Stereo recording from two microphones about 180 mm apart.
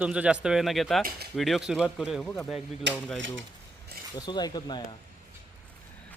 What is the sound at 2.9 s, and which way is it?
Speech, 75° right (ahead or behind).